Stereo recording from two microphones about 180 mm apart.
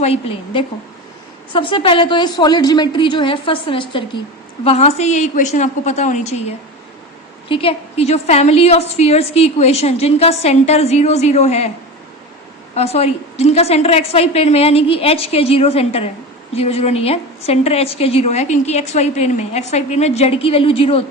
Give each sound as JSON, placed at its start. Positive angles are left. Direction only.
{"t": 0.0, "sound": "a woman's voice", "side_deg": 35}
{"t": 7.4, "sound": "a woman's voice", "side_deg": 30}
{"t": 12.7, "sound": "a woman's voice", "side_deg": 35}